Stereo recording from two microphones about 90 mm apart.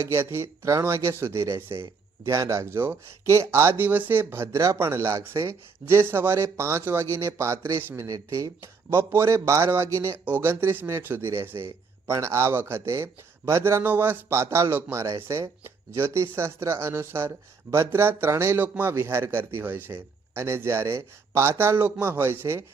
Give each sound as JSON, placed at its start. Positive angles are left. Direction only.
{"t": 0.0, "sound": "speech", "side_deg": -30}
{"t": 4.5, "sound": "speech", "side_deg": -35}
{"t": 8.0, "sound": "speech", "side_deg": -40}
{"t": 18.6, "sound": "speech", "side_deg": -20}